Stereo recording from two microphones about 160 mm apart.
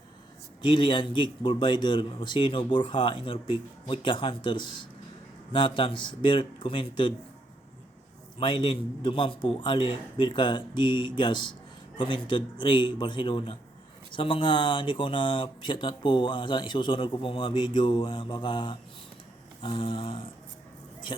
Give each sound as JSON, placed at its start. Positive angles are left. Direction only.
{"t": 0.6, "sound": "speech", "side_deg": 30}
{"t": 8.4, "sound": "speech", "side_deg": 30}